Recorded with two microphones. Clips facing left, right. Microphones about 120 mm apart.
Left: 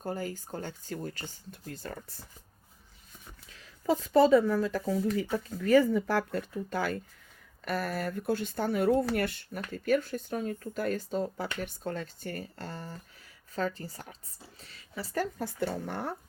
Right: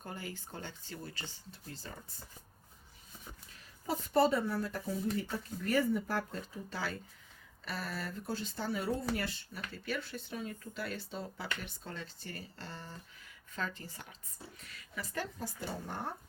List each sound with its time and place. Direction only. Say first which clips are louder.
0.0 s speech: left 9 dB; 40° left (ahead or behind); by 2.1 s 60° left (ahead or behind)
3.9 s speech: left 7 dB; 90° left
6.7 s speech: left 5 dB; 50° left (ahead or behind)
15.4 s speech: left 8 dB; 65° left (ahead or behind); by 16.1 s 80° left